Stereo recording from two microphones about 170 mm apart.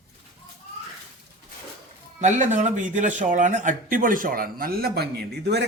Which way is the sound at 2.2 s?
45° right (ahead or behind).